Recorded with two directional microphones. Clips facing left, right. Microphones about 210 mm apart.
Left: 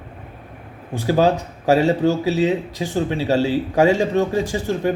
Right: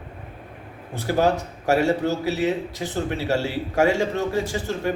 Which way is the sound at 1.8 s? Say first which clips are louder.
Left 4 dB; 15° left (ahead or behind).